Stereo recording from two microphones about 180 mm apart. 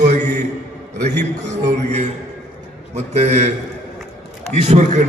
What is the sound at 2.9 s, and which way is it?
A man's voice, 40° right (ahead or behind).